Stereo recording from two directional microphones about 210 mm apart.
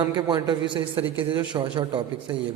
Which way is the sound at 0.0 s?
20° right (ahead or behind).